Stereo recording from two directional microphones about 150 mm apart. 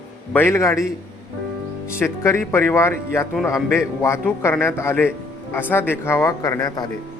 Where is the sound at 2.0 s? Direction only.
15° left (ahead or behind).